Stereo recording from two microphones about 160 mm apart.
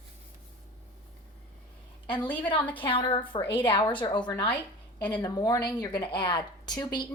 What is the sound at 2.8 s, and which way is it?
A woman's voice, 30° left (ahead or behind).